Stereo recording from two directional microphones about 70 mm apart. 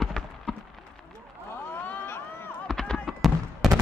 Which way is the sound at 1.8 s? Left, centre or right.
Left.